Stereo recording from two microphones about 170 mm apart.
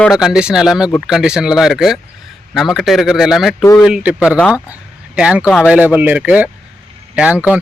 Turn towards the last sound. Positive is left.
turn(degrees=-10)  # may be behind; listen again after turning